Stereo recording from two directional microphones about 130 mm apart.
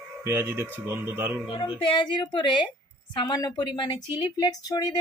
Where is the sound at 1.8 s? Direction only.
40° left (ahead or behind).